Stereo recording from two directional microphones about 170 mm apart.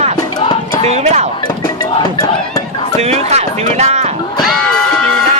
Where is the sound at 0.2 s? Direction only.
25° left (ahead or behind).